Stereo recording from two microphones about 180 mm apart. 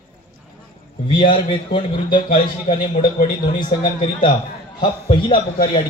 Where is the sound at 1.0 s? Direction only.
25° left (ahead or behind).